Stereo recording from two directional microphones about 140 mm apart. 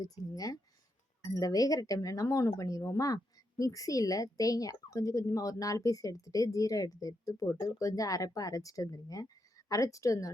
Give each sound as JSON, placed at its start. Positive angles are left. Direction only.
{"t": 0.0, "sound": "speech", "side_deg": 25}